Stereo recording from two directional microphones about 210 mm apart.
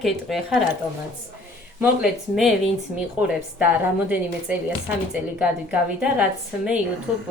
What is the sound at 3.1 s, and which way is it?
Speech, 5° right (ahead or behind).